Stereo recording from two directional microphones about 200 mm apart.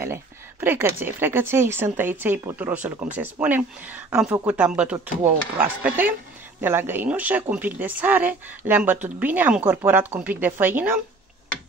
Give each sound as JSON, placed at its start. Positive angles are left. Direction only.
{"t": 0.0, "sound": "a woman's voice", "side_deg": -10}